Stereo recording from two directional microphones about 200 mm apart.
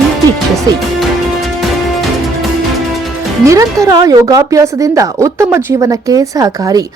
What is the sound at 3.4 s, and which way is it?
Speech, 15° right (ahead or behind).